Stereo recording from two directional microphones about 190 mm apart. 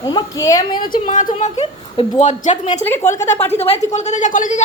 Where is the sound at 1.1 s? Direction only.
40° left (ahead or behind).